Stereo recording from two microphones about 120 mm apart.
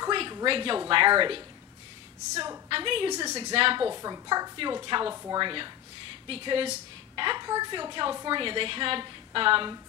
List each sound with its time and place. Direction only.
0.1 s a sound: 40° right (ahead or behind)
0.5 s a woman's voice: 45° right (ahead or behind)
2.3 s speech: 30° right (ahead or behind)
2.7 s a woman's voice: 45° right (ahead or behind)
3.1 s speech: 30° right (ahead or behind)
3.5 s a woman's voice: 45° right (ahead or behind)
3.9 s speech: 30° right (ahead or behind)
5.1 s speech: 25° right (ahead or behind)
5.4 s a woman's voice: 45° right (ahead or behind)